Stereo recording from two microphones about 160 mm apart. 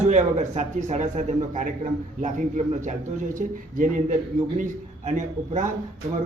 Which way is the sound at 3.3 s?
55° right (ahead or behind).